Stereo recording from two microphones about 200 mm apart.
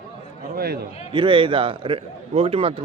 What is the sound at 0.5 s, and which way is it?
Speech, 50° right (ahead or behind).